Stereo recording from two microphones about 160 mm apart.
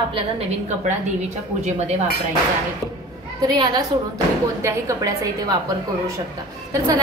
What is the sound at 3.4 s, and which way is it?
A woman's voice, 25° right (ahead or behind).